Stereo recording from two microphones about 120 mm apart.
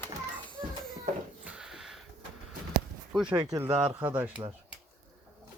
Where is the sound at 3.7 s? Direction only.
50° right (ahead or behind).